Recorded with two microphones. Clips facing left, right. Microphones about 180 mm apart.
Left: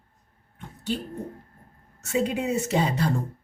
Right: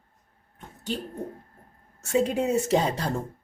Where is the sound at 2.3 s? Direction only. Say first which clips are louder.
Right 2 dB; 40° right (ahead or behind).